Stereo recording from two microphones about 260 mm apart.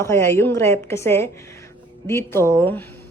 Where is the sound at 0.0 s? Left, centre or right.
Centre.